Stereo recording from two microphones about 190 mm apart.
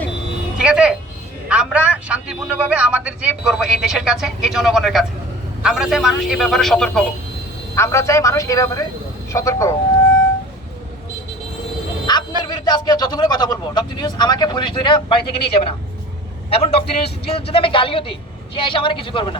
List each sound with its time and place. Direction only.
0.6 s a man's voice: 5° right (ahead or behind)
7.8 s a man's voice: 15° left (ahead or behind)
12.1 s a sound: 20° left (ahead or behind)
12.5 s a man's voice: 20° left (ahead or behind)